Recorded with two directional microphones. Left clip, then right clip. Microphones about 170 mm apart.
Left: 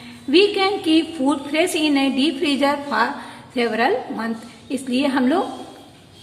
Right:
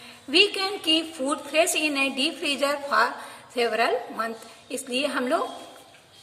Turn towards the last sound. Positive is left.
turn(degrees=-30)  # may be behind; listen again after turning